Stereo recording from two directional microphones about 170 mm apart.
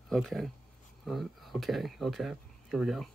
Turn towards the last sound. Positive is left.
turn(degrees=0)  # may be behind; listen again after turning